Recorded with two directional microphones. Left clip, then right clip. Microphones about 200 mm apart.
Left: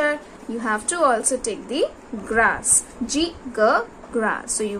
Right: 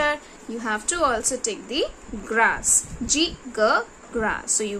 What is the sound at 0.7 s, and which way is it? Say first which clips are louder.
A woman's voice: left 3 dB; 25° right (ahead or behind).